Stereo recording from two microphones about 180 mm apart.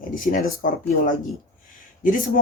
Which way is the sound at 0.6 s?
50° left (ahead or behind).